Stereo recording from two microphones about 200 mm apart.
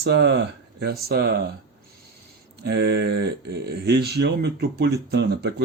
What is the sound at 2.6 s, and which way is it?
Speech, 55° right (ahead or behind).